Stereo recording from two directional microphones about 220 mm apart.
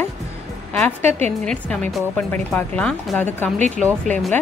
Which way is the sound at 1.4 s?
5° left (ahead or behind).